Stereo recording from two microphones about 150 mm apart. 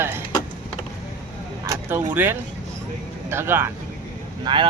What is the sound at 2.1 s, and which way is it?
Speech, 10° right (ahead or behind).